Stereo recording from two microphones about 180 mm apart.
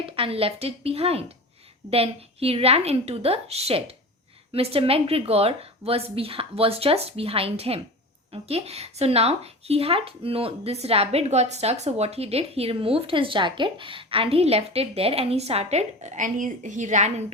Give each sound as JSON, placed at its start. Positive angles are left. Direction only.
{"t": 0.0, "sound": "speech", "side_deg": -30}